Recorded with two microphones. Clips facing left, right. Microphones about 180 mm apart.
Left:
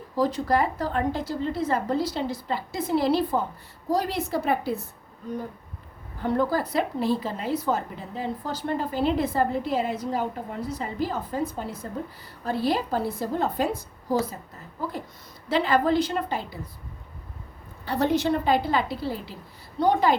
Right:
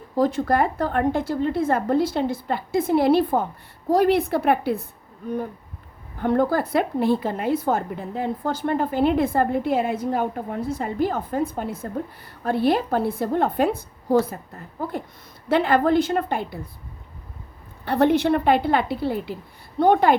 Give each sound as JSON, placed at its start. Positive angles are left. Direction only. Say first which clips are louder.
{"t": 0.2, "sound": "a woman's voice", "louder": "right 3 dB", "side_deg": -50}
{"t": 6.2, "sound": "a woman's voice", "louder": "right 4 dB", "side_deg": -55}
{"t": 15.4, "sound": "a woman's voice", "louder": "right 3 dB", "side_deg": -55}
{"t": 17.8, "sound": "a woman's voice", "louder": "right 5 dB", "side_deg": -60}